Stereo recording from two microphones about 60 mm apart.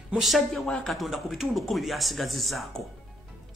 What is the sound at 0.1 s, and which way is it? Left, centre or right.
A man's voice, centre.